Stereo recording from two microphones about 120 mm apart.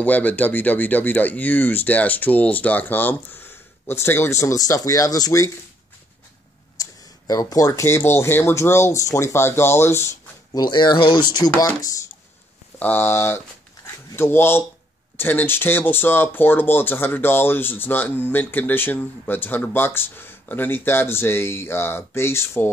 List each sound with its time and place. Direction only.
0.0 s speech: 15° left (ahead or behind); by 5.5 s 30° left (ahead or behind)
6.8 s speech: 30° left (ahead or behind)
10.5 s speech: 35° left (ahead or behind)
12.7 s speech: 15° left (ahead or behind)